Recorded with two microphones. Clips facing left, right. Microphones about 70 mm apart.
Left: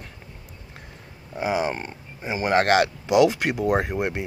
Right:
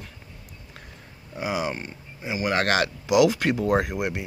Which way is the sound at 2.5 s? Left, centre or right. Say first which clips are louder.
Left 6 dB; left.